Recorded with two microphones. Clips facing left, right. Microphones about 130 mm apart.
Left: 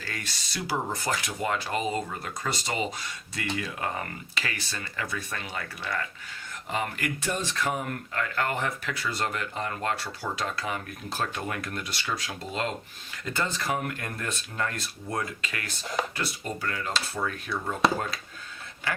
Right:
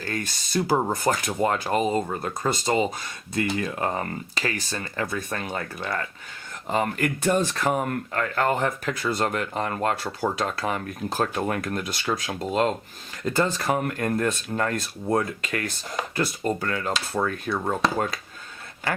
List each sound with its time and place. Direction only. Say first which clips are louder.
0.0 s speech: right 7 dB; 50° right (ahead or behind)
3.6 s speech: right 6 dB; 35° right (ahead or behind)